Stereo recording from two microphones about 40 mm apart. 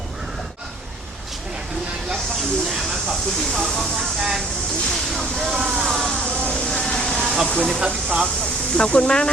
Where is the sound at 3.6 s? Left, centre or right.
Centre.